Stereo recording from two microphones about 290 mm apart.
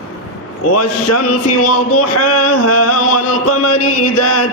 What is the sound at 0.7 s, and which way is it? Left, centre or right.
Mantra, left.